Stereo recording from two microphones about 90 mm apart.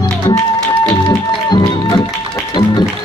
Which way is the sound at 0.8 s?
50° left (ahead or behind).